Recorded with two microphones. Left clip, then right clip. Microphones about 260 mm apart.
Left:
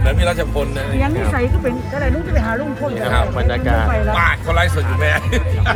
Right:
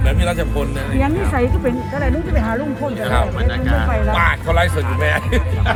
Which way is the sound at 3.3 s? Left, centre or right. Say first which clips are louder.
Left 3 dB; centre.